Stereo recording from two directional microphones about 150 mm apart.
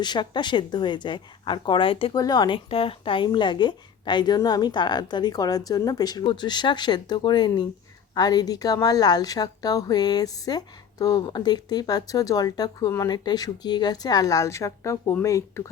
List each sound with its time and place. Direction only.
0.0 s speech: 30° left (ahead or behind)
2.1 s a woman's voice: 25° left (ahead or behind)
2.6 s a woman's voice: 40° left (ahead or behind); by 15.6 s 20° left (ahead or behind)